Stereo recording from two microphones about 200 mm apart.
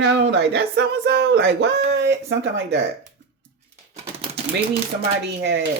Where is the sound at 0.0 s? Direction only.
60° right (ahead or behind).